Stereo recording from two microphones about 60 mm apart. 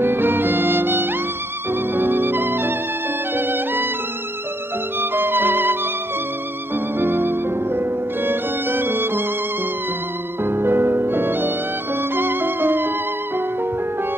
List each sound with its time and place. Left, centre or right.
0.0 s music: right
5.1 s music: right
7.0 s music: right
10.4 s music: right